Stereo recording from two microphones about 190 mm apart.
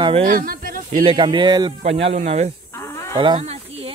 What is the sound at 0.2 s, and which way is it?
Speech, 45° right (ahead or behind).